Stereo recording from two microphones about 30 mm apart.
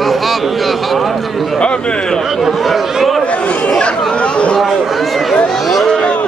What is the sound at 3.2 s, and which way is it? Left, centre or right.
Chatter, left.